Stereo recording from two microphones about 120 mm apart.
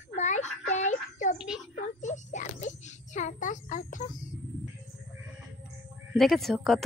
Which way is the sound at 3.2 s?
90° left.